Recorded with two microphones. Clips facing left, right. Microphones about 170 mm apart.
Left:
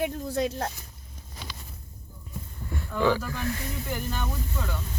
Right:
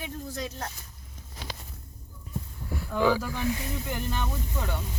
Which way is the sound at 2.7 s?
5° right (ahead or behind).